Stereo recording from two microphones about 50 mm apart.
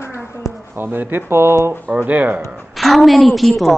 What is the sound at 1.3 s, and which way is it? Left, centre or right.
Speech, right.